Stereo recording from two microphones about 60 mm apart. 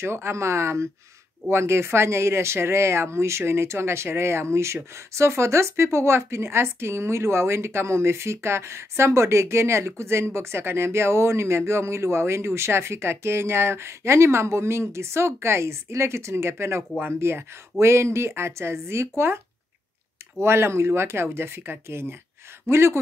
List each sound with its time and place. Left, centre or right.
0.0 s a woman's voice: right